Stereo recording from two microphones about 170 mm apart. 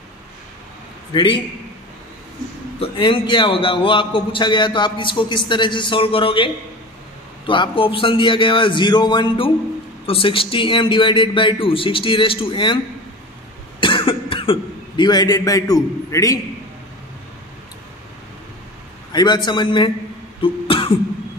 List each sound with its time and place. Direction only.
1.1 s a man's voice: 30° left (ahead or behind)
2.8 s a man's voice: 30° left (ahead or behind)
13.7 s cough: 30° left (ahead or behind)
19.1 s a man's voice: 25° left (ahead or behind)
20.4 s throat clearing: 30° left (ahead or behind)